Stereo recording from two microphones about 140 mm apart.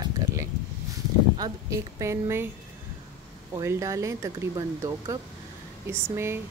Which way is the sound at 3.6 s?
20° right (ahead or behind).